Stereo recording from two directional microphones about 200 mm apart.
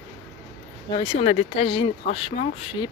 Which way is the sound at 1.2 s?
35° left (ahead or behind).